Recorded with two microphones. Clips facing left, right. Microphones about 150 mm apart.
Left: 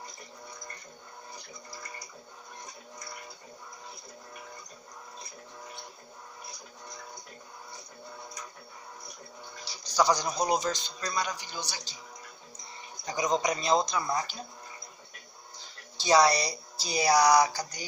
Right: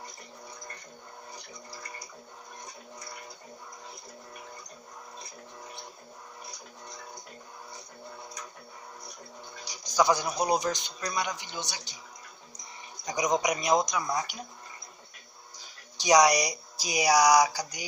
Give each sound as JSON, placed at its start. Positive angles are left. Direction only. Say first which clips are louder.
{"t": 9.7, "sound": "a man's voice", "louder": "right 1 dB", "side_deg": -15}
{"t": 12.5, "sound": "a sound", "louder": "even", "side_deg": -15}
{"t": 14.1, "sound": "a man's voice", "louder": "even", "side_deg": -15}
{"t": 16.0, "sound": "a man's voice", "louder": "right 1 dB", "side_deg": -15}